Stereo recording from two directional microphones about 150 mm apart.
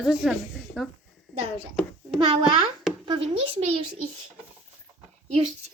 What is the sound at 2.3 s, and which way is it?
Speech, 40° right (ahead or behind).